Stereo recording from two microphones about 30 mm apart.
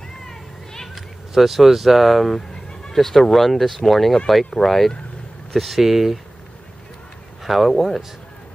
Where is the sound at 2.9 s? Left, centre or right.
Centre.